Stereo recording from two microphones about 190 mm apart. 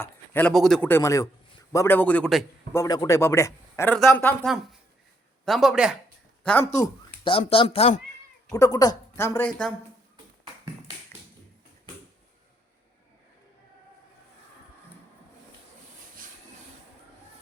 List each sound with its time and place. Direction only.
0.0 s speech: 10° left (ahead or behind)
2.8 s speech: 20° left (ahead or behind)
5.5 s speech: centre (ahead or behind)
7.3 s speech: 30° left (ahead or behind)
8.5 s speech: 20° left (ahead or behind)